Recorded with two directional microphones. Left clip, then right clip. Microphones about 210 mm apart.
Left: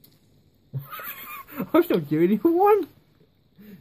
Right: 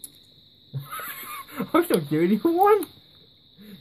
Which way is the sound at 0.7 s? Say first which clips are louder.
Right 2 dB; 35° left (ahead or behind).